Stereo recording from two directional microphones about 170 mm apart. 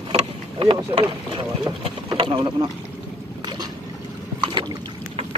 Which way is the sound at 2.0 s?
25° right (ahead or behind).